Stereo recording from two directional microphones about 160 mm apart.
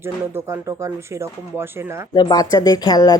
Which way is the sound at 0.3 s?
20° right (ahead or behind).